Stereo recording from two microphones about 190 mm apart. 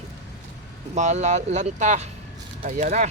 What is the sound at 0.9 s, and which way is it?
Speech, 40° right (ahead or behind).